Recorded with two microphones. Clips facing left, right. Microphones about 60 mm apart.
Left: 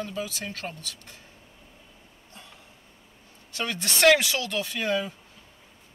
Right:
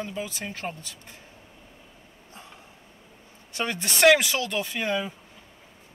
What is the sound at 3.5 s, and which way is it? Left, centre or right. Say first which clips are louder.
A woman's voice: right 2 dB; right.